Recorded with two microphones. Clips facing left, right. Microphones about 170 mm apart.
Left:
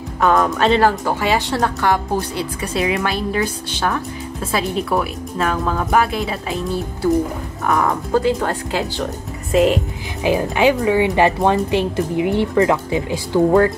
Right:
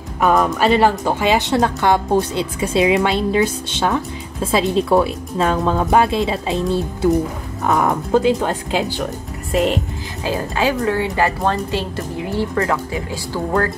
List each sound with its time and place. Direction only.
0.2 s speech: 10° right (ahead or behind)
0.7 s speech: 20° right (ahead or behind)
9.5 s speech: centre (ahead or behind)
10.2 s a woman's voice: 15° left (ahead or behind)